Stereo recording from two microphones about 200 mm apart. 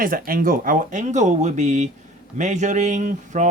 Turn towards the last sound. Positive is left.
turn(degrees=-35)  # may be behind; listen again after turning